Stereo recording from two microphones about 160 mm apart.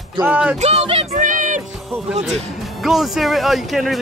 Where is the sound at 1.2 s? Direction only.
55° right (ahead or behind).